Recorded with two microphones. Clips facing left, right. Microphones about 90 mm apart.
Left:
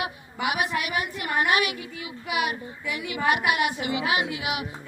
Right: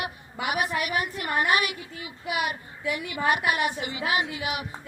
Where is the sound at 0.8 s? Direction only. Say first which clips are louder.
Right 1 dB; 45° right (ahead or behind).